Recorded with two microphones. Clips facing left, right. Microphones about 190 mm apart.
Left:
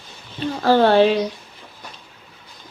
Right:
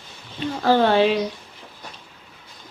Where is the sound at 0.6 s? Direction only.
35° left (ahead or behind).